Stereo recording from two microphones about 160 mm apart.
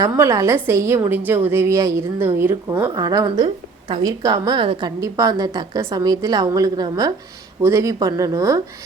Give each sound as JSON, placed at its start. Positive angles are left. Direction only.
{"t": 0.0, "sound": "a woman's voice", "side_deg": -20}
{"t": 4.9, "sound": "a woman's voice", "side_deg": -20}